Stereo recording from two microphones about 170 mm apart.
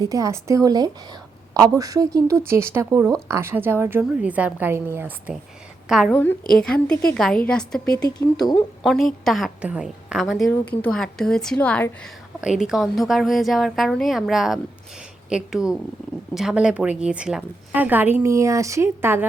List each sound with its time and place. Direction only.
0.0 s a woman's voice: 20° right (ahead or behind); by 11.9 s 5° left (ahead or behind)
12.4 s a woman's voice: 5° right (ahead or behind)